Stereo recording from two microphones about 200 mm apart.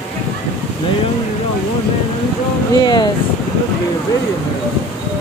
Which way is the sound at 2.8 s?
20° left (ahead or behind).